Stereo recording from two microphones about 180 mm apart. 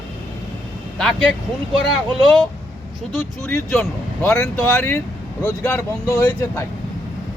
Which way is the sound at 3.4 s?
10° left (ahead or behind).